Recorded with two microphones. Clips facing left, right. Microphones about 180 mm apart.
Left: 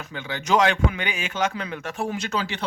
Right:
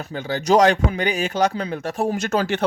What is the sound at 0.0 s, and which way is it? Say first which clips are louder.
A man's voice: right 7 dB; 40° right (ahead or behind).